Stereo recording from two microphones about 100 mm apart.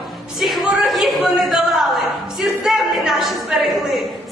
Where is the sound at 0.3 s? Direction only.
Centre (ahead or behind).